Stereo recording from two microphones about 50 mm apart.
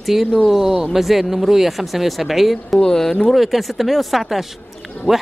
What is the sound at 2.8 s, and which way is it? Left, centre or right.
Speech, centre.